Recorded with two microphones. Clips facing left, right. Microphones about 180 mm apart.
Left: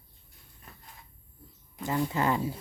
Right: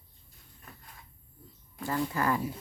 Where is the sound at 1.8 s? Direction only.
20° left (ahead or behind).